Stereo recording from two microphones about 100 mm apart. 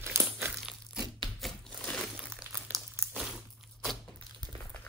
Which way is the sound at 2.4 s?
45° left (ahead or behind).